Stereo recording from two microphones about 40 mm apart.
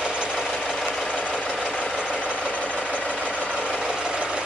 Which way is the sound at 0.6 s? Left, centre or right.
Centre.